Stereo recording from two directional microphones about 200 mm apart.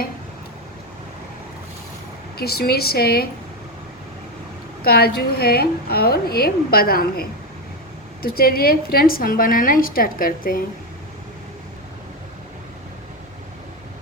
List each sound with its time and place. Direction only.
2.4 s a woman's voice: 50° left (ahead or behind)
4.8 s a woman's voice: 50° left (ahead or behind)